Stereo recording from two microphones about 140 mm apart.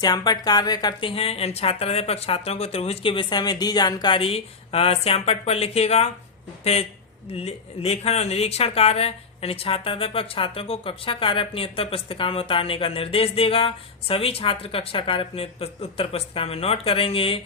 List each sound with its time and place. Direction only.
0.0 s speech: 30° left (ahead or behind)
1.1 s speech: 45° left (ahead or behind)